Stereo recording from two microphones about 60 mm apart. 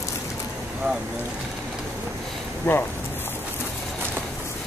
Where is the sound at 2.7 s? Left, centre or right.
Left.